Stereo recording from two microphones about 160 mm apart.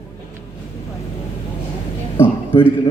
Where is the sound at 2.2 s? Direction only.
15° left (ahead or behind).